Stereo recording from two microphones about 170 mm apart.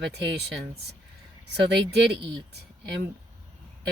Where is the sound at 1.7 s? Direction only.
80° right.